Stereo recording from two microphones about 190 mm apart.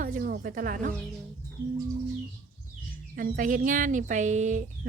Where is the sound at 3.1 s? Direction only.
45° right (ahead or behind).